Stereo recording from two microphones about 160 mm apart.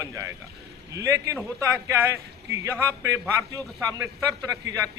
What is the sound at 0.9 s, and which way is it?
Speech, 20° right (ahead or behind).